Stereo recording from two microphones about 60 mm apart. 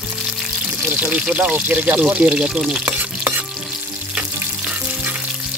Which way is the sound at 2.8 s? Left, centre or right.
Right.